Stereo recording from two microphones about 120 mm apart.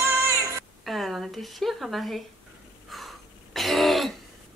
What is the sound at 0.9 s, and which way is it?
A woman's voice, centre (ahead or behind).